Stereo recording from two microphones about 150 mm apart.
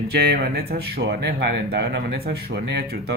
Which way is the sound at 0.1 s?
90° right.